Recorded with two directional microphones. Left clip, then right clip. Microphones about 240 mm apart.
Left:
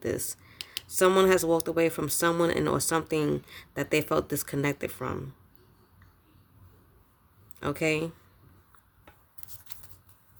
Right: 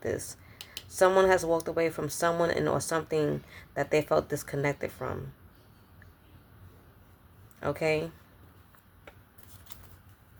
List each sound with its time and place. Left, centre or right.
0.0 s speech: left
7.6 s speech: left